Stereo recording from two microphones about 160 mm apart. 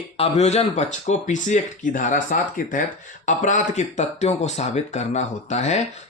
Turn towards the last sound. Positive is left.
turn(degrees=45)  # may be behind; listen again after turning